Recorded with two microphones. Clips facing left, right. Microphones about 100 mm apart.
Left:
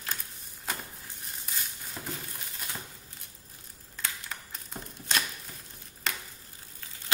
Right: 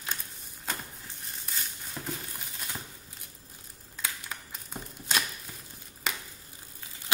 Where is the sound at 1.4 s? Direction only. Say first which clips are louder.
Even; centre (ahead or behind).